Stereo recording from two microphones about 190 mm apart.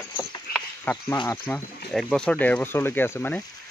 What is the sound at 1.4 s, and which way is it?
Speech, 5° left (ahead or behind).